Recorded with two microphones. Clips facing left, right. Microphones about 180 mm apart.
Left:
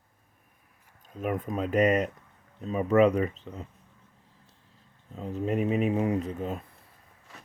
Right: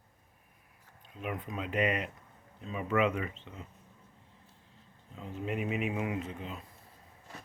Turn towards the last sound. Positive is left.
turn(degrees=45)  # may be behind; listen again after turning